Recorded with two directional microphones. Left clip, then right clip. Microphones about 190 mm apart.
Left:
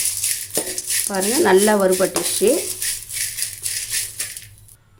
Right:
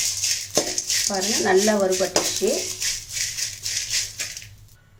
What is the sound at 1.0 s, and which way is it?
Speech, 55° left (ahead or behind).